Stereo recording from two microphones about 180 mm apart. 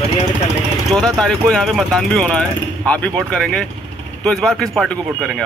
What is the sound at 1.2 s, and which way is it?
Speech, 5° left (ahead or behind).